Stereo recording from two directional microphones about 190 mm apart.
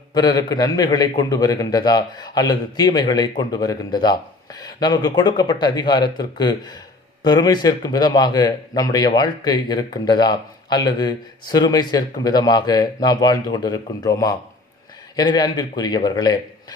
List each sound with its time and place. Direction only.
0.1 s a man's voice: 20° left (ahead or behind)